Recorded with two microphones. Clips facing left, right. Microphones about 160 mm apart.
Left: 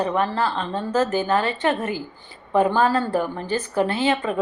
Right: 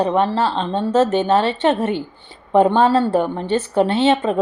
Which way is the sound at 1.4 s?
75° right (ahead or behind).